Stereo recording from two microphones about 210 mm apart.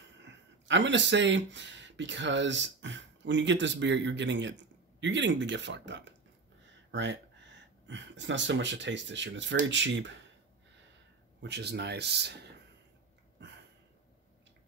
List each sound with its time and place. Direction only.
0.2 s speech: 60° right (ahead or behind)
11.4 s speech: 55° right (ahead or behind)